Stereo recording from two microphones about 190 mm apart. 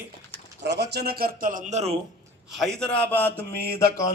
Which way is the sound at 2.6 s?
5° left (ahead or behind).